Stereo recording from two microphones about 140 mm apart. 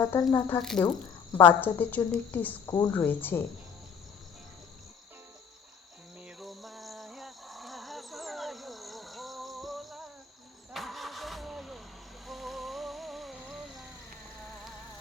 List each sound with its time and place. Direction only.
0.0 s speech: 25° left (ahead or behind)
0.6 s speech: 5° left (ahead or behind)
1.4 s a woman's voice: 15° left (ahead or behind)
2.6 s speech: 25° left (ahead or behind)
2.9 s a woman's voice: 15° left (ahead or behind)
6.2 s a sound: centre (ahead or behind)
10.7 s vehicle: centre (ahead or behind)
12.2 s music: centre (ahead or behind)